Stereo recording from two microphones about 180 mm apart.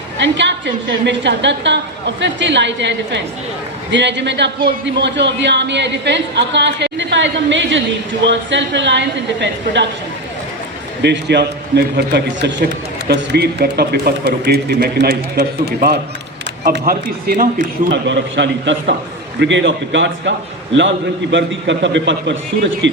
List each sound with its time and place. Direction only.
0.2 s a woman's voice: 80° right
11.0 s a man's voice: 70° right (ahead or behind)
13.1 s speech: 65° right (ahead or behind)
17.9 s a woman's voice: 85° right